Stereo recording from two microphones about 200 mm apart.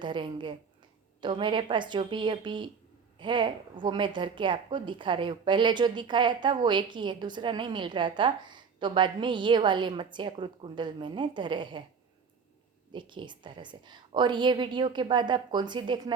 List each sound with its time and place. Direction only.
0.0 s a woman's voice: 25° right (ahead or behind)
12.9 s a woman's voice: 25° right (ahead or behind)